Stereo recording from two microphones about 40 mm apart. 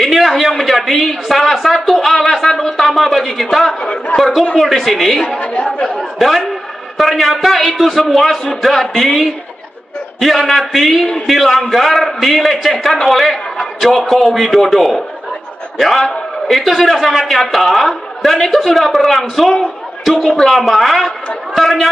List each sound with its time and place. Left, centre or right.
0.0 s a sound: centre
0.5 s a man's voice: centre
5.4 s speech: left
5.7 s a man's voice: centre
5.9 s a man's voice: centre
20.5 s a man's voice: centre